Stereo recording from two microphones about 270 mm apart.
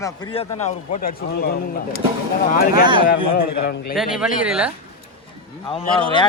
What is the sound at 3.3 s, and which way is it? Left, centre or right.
Speech, left.